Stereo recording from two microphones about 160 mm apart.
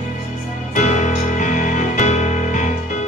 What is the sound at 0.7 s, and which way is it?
Music, 50° left (ahead or behind).